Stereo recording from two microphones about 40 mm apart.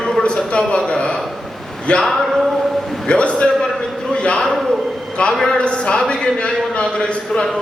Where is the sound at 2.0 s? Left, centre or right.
Centre.